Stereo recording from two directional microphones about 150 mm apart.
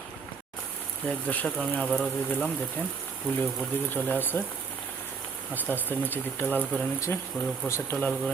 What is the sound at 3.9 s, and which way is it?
Speech, 10° left (ahead or behind).